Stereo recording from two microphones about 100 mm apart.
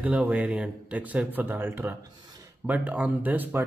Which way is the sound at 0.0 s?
15° right (ahead or behind).